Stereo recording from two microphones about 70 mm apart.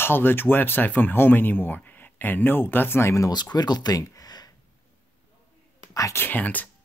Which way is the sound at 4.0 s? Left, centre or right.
Left.